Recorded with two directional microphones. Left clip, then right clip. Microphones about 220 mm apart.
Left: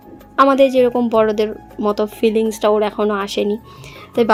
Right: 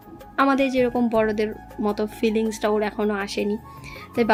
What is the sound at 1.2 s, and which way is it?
Speech, 20° right (ahead or behind).